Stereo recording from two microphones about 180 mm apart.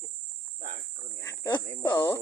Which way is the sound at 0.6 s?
50° right (ahead or behind).